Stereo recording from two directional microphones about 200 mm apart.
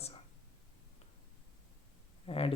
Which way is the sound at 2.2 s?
30° left (ahead or behind).